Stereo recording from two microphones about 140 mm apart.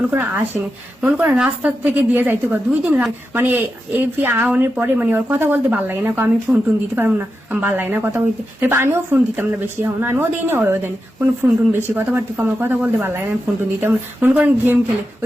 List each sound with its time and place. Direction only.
0.1 s a woman's voice: 15° right (ahead or behind)